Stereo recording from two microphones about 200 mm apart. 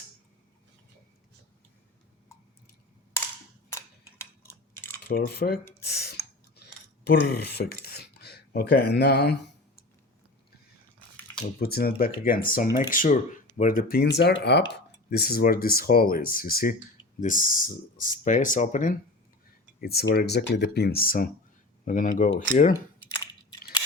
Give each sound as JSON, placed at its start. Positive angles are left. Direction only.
{"t": 5.0, "sound": "speech", "side_deg": 50}
{"t": 5.8, "sound": "a sound", "side_deg": 55}
{"t": 7.1, "sound": "speech", "side_deg": 50}
{"t": 11.6, "sound": "speech", "side_deg": 50}
{"t": 19.8, "sound": "speech", "side_deg": 50}